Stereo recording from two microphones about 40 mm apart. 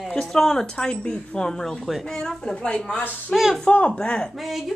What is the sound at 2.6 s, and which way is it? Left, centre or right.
Speech, left.